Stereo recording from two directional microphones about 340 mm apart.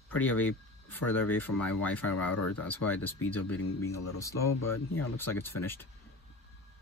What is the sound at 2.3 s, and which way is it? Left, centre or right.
Speech, left.